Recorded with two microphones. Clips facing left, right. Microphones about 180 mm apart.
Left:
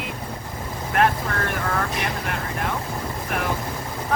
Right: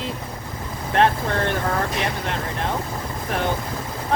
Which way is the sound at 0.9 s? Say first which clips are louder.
Right 2 dB; 30° right (ahead or behind).